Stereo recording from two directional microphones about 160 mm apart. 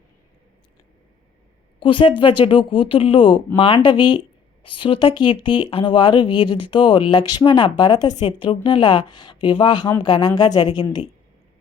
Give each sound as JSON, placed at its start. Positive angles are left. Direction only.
{"t": 1.8, "sound": "speech", "side_deg": 30}